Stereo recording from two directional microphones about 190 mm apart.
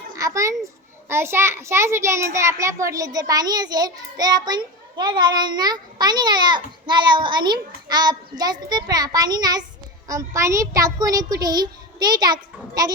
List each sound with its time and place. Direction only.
0.2 s a child's voice: 15° right (ahead or behind)